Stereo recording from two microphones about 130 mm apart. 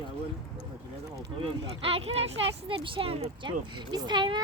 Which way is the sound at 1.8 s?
45° right (ahead or behind).